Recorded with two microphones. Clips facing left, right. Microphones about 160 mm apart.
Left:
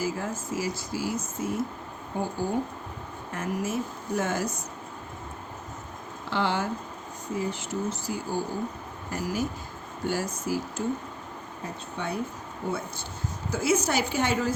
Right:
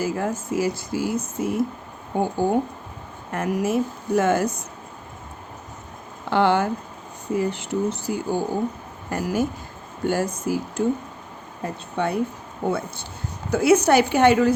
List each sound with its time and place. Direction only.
0.0 s speech: 60° right (ahead or behind)
3.3 s speech: 65° right (ahead or behind)
6.3 s speech: 60° right (ahead or behind)